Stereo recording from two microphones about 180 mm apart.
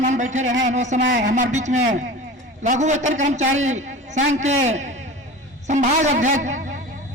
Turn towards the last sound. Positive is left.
turn(degrees=-40)  # may be behind; listen again after turning